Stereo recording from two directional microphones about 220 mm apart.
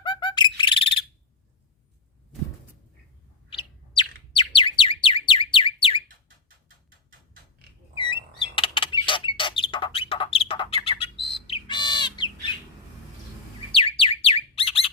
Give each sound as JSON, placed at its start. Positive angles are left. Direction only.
{"t": 0.0, "sound": "bird", "side_deg": 20}
{"t": 3.5, "sound": "bird", "side_deg": 20}
{"t": 7.9, "sound": "bird", "side_deg": 20}
{"t": 13.7, "sound": "bird", "side_deg": 25}